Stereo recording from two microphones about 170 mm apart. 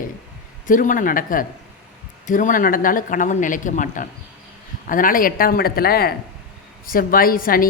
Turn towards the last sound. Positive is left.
turn(degrees=55)  # may be behind; listen again after turning